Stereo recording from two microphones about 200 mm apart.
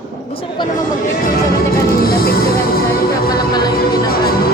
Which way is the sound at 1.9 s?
50° left (ahead or behind).